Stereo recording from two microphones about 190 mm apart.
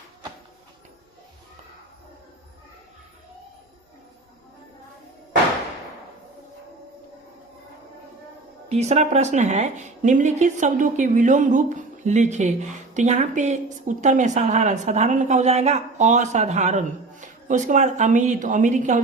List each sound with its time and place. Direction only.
8.7 s a woman's voice: 35° right (ahead or behind)